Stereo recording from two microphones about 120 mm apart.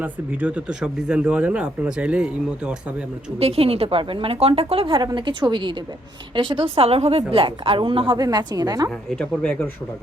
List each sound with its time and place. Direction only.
0.0 s speech: 15° right (ahead or behind)
3.3 s a woman's voice: 55° right (ahead or behind)
8.2 s a woman's voice: 35° right (ahead or behind)
9.0 s speech: 5° left (ahead or behind)